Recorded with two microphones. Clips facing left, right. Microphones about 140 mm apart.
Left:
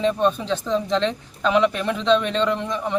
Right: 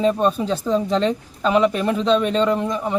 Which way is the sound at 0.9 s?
40° right (ahead or behind).